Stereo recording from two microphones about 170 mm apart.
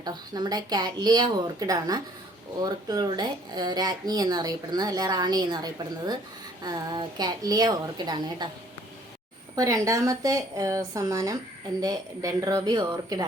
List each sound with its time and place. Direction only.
0.0 s speech: 25° right (ahead or behind)
9.6 s speech: 20° right (ahead or behind)